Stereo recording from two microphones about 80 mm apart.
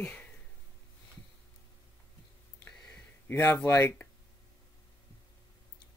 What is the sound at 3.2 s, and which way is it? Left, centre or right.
Speech, left.